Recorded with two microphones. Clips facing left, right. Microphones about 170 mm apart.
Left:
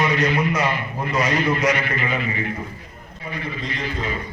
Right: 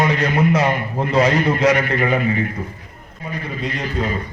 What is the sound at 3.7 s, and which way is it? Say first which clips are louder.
Speech: right 5 dB; 40° right (ahead or behind).